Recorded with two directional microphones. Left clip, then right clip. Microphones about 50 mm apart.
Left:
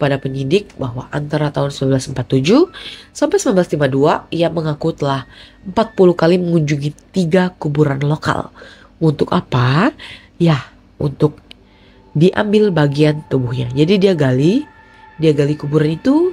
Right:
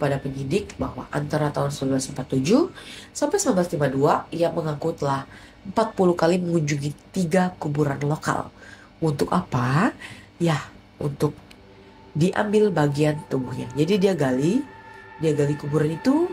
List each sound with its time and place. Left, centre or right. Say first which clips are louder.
0.0 s speech: left 8 dB; right
12.2 s speech: left 7 dB; centre